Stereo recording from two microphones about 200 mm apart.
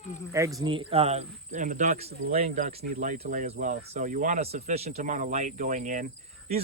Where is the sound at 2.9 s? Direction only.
45° right (ahead or behind).